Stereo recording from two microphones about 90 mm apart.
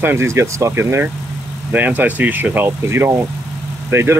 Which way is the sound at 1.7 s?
20° right (ahead or behind).